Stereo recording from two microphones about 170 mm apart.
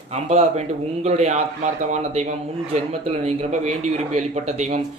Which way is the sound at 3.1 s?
40° right (ahead or behind).